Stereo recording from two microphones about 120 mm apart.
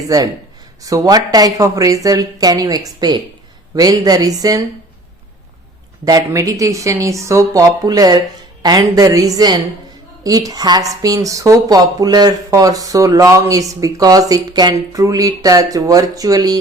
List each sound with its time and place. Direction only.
0.8 s speech: 30° right (ahead or behind)
6.1 s speech: 30° right (ahead or behind)